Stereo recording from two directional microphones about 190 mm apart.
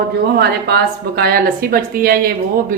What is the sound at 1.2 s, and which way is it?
A woman's voice, 50° right (ahead or behind).